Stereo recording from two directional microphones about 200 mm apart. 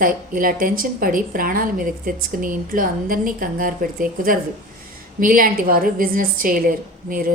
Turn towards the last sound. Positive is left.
turn(degrees=-45)  # may be behind; listen again after turning